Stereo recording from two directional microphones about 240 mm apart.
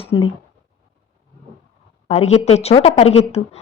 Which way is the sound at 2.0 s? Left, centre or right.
Left.